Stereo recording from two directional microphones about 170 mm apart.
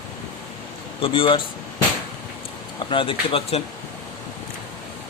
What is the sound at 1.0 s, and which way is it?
Speech, 30° left (ahead or behind).